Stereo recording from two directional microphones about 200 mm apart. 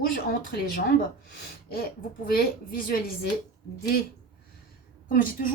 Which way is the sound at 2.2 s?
50° left (ahead or behind).